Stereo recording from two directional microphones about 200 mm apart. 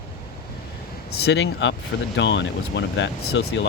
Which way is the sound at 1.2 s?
60° left (ahead or behind).